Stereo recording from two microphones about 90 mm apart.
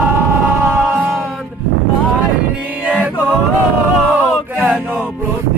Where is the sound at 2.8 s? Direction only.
10° right (ahead or behind).